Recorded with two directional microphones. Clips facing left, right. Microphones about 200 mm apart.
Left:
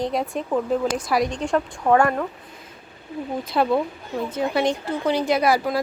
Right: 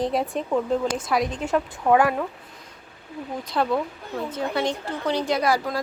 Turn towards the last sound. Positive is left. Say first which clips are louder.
# left 3 dB
turn(degrees=10)  # may be behind; listen again after turning